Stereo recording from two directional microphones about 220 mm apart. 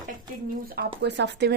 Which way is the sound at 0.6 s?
40° right (ahead or behind).